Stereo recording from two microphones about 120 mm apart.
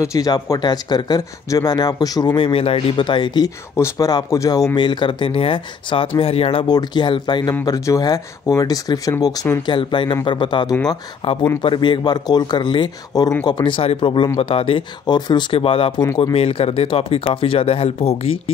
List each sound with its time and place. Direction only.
0.0 s speech: 30° left (ahead or behind)
2.3 s speech: 50° left (ahead or behind)
3.7 s speech: 25° left (ahead or behind)
4.7 s speech: 40° left (ahead or behind)
6.6 s speech: 35° left (ahead or behind)
7.6 s speech: 30° left (ahead or behind)
11.2 s speech: 55° left (ahead or behind)
11.6 s speech: 45° left (ahead or behind)
15.1 s speech: 35° left (ahead or behind); by 18.4 s 55° left (ahead or behind)